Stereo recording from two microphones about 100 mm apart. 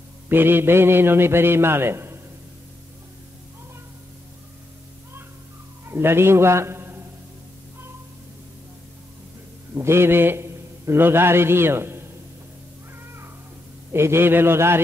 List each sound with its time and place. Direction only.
0.3 s a man's voice: 20° right (ahead or behind)
5.9 s a man's voice: 25° right (ahead or behind)
9.8 s a man's voice: 25° right (ahead or behind)
13.9 s a man's voice: 25° right (ahead or behind)